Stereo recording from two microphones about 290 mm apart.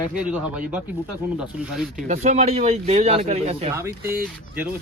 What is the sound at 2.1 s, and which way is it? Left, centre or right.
Speech, right.